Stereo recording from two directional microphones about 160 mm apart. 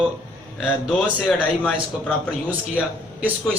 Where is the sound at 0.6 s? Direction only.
5° right (ahead or behind).